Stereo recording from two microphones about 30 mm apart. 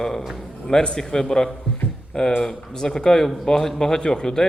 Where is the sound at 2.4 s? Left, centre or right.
Centre.